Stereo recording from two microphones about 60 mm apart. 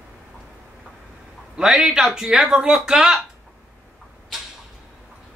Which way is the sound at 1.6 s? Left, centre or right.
Centre.